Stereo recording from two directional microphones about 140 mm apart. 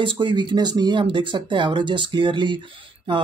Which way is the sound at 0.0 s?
35° right (ahead or behind).